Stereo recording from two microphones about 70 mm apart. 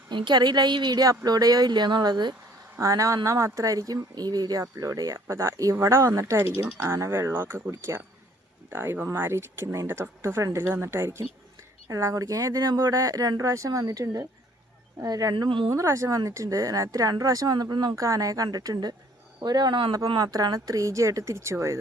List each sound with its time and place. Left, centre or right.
0.1 s a woman's voice: right
2.8 s speech: right
5.1 s speech: right
10.6 s speech: right
11.9 s speech: right
12.6 s speech: right
15.7 s speech: right
18.0 s speech: right
18.4 s speech: right
20.7 s speech: right